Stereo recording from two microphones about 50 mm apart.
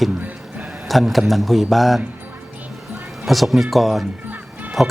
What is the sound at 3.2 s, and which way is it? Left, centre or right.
Speech, centre.